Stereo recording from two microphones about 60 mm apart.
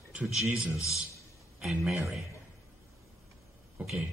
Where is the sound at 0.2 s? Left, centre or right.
Centre.